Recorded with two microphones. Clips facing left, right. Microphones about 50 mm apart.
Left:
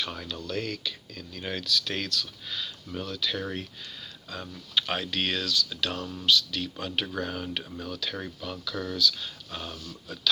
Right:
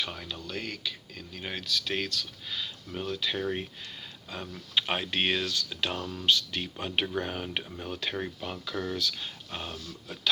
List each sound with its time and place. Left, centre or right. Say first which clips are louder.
0.0 s speech: left 1 dB; centre
3.1 s speech: right 2 dB; right
5.9 s speech: left 1 dB; centre
7.8 s speech: right 1 dB; right